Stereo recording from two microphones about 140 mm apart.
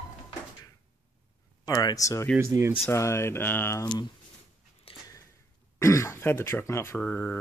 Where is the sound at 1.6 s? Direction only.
25° left (ahead or behind).